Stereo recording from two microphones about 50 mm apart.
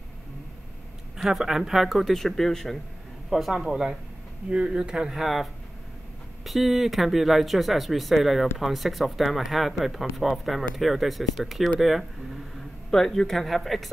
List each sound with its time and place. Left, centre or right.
1.1 s speech: centre